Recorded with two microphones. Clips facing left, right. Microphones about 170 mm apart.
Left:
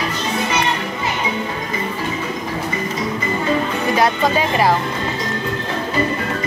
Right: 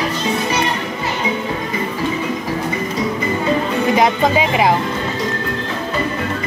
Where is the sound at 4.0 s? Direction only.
15° right (ahead or behind).